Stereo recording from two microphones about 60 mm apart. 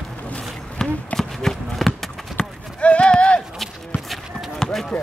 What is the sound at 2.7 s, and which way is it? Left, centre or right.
Clip-clop, centre.